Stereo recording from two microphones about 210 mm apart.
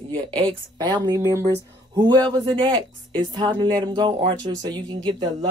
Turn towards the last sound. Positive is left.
turn(degrees=-20)  # may be behind; listen again after turning